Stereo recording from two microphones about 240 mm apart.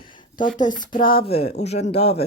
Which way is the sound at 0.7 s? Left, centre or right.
Left.